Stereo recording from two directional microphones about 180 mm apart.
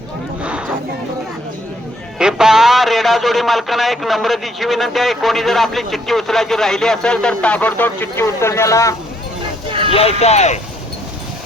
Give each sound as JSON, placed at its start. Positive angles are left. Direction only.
{"t": 2.1, "sound": "a man's voice", "side_deg": -5}
{"t": 9.9, "sound": "speech", "side_deg": 35}